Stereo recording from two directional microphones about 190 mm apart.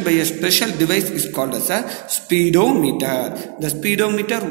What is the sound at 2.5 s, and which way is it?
Speech, 10° left (ahead or behind).